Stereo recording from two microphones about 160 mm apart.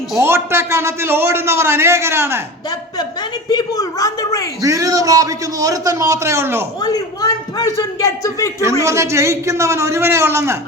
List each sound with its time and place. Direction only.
0.2 s a man's voice: 15° right (ahead or behind)
3.5 s a man's voice: 25° left (ahead or behind)
4.6 s a man's voice: 20° right (ahead or behind)
6.8 s a man's voice: 25° left (ahead or behind)
8.8 s a man's voice: 20° right (ahead or behind)